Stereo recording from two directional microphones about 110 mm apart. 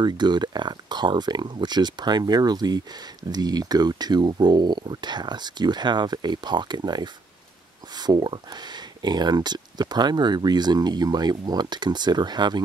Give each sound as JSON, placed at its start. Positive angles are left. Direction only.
{"t": 0.0, "sound": "speech", "side_deg": -40}